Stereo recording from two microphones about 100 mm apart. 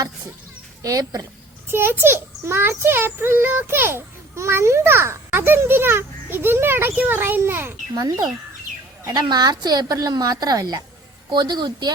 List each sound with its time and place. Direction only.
0.8 s a woman's voice: 35° right (ahead or behind)
1.6 s a child's voice: 25° right (ahead or behind)
7.9 s a woman's voice: 40° right (ahead or behind)